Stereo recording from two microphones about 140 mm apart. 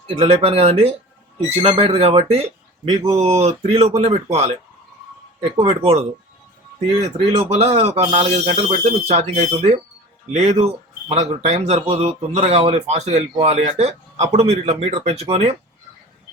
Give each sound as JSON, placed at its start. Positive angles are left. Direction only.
{"t": 0.2, "sound": "speech", "side_deg": -45}
{"t": 2.8, "sound": "speech", "side_deg": -30}
{"t": 3.2, "sound": "speech", "side_deg": -50}
{"t": 5.5, "sound": "speech", "side_deg": -45}
{"t": 7.3, "sound": "speech", "side_deg": -45}